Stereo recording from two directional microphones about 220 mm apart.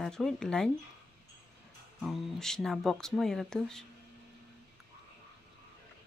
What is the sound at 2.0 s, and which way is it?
Speech, centre (ahead or behind).